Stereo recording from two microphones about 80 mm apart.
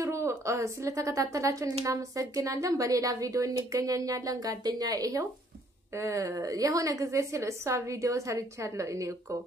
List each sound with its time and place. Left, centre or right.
0.0 s a woman's voice: right